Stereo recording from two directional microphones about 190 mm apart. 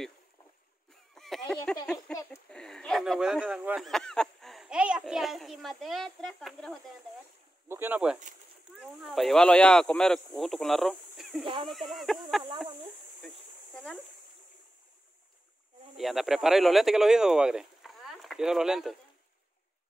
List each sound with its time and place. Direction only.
1.1 s a sound: centre (ahead or behind)
1.9 s speech: 5° left (ahead or behind)
7.6 s speech: 10° right (ahead or behind)
11.4 s speech: 30° right (ahead or behind)
11.7 s speech: centre (ahead or behind)
16.0 s speech: centre (ahead or behind)